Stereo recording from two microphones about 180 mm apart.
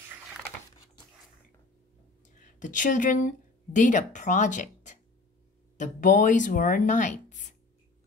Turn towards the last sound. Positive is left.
turn(degrees=45)  # may be behind; listen again after turning